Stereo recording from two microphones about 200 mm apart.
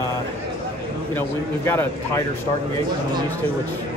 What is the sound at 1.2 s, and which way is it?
Speech, 10° left (ahead or behind).